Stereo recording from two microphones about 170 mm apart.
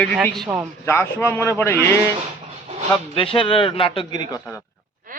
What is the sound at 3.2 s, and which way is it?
Speech, 30° left (ahead or behind).